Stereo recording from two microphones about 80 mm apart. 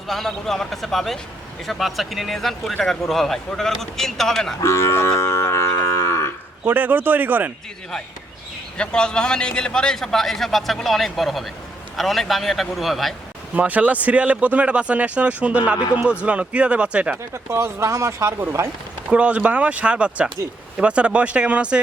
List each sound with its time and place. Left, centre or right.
0.1 s a man's voice: centre
4.6 s livestock: left
6.7 s speech: right
8.8 s a man's voice: centre
13.6 s speech: centre
17.3 s speech: right
19.1 s speech: centre